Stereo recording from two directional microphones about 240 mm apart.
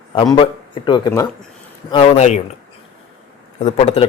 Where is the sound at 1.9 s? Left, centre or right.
Left.